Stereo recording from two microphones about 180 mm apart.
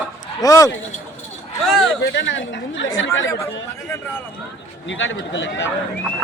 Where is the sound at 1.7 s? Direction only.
5° left (ahead or behind).